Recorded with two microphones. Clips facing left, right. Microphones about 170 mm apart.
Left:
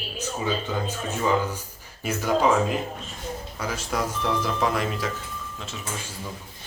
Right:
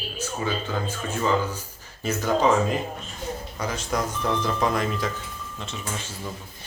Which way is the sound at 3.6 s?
5° left (ahead or behind).